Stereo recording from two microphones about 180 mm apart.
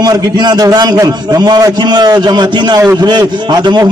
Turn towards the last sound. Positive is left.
turn(degrees=-25)  # may be behind; listen again after turning